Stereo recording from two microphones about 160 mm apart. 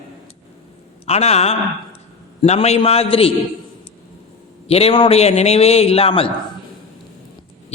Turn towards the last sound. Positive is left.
turn(degrees=35)  # may be behind; listen again after turning